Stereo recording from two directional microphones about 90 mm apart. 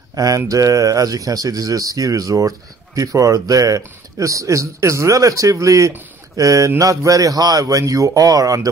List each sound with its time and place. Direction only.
0.1 s mantra: 45° right (ahead or behind)
0.5 s speech: 40° right (ahead or behind)